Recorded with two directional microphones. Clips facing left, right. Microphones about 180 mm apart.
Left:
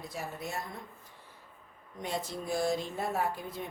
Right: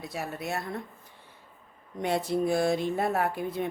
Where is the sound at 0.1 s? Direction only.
70° right (ahead or behind).